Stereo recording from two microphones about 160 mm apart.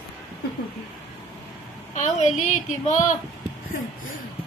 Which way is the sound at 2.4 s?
50° left (ahead or behind).